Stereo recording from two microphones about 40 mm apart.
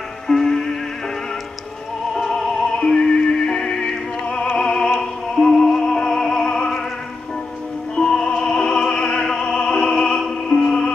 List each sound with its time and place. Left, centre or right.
0.3 s music: centre
2.1 s music: centre
4.3 s music: left
4.6 s music: centre
5.8 s music: left
6.0 s music: centre
7.9 s music: centre